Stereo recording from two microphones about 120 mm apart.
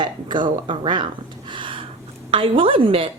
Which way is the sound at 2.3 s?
50° right (ahead or behind).